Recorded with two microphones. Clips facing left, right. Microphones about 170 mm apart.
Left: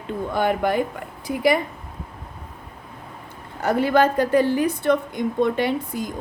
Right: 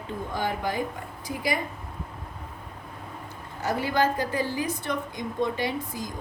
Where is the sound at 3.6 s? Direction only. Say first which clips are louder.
Left 7 dB; 60° left (ahead or behind).